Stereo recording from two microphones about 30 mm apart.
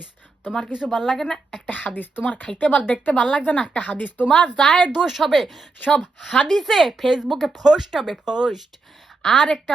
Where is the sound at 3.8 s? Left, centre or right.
Left.